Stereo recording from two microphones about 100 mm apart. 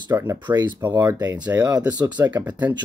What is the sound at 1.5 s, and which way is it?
Speech, 25° right (ahead or behind).